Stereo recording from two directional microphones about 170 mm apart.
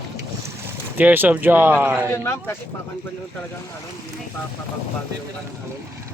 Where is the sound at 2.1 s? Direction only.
15° left (ahead or behind).